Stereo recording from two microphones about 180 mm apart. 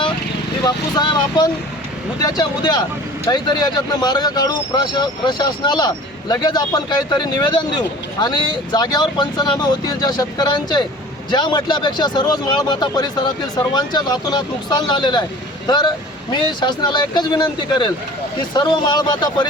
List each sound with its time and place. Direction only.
0.6 s speech: 25° left (ahead or behind)